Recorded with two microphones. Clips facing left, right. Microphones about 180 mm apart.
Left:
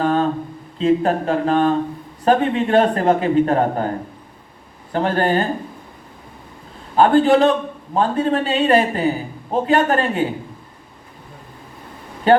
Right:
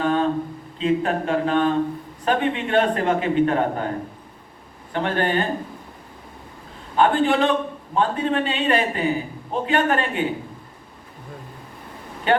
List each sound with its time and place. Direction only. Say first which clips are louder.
0.0 s a sound: left 3 dB; 40° left (ahead or behind)
0.8 s a man's voice: left 4 dB; 35° left (ahead or behind)
4.9 s a man's voice: left 4 dB; 40° left (ahead or behind)
6.9 s a man's voice: left 5 dB; 40° left (ahead or behind)
12.3 s speech: left 6 dB; 35° left (ahead or behind)